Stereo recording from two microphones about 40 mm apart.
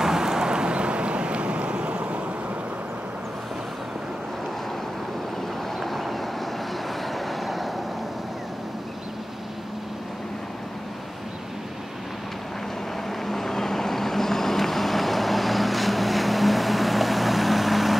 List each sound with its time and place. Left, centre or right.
0.0 s vehicle: centre; by 2.2 s right
5.8 s vehicle: centre
7.2 s vehicle: centre
13.3 s vehicle: centre